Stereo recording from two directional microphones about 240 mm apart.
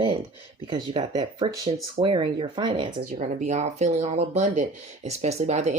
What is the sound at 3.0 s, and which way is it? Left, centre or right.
Speech, right.